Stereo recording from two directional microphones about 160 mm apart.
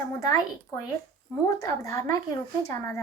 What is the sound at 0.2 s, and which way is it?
A woman's voice, 20° left (ahead or behind).